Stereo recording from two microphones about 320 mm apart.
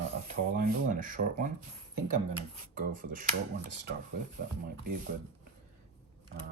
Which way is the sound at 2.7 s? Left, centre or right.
Right.